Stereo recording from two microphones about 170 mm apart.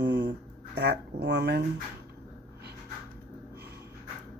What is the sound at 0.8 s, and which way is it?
Speech, 75° right (ahead or behind).